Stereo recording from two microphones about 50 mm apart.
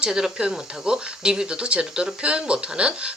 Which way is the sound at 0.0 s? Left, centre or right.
Centre.